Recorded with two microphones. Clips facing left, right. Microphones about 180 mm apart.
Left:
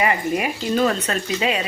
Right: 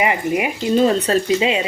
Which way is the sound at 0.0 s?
20° right (ahead or behind).